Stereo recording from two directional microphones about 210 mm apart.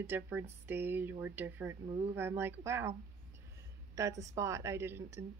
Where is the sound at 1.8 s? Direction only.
25° right (ahead or behind).